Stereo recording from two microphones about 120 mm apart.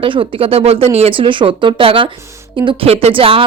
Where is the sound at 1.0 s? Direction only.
45° right (ahead or behind).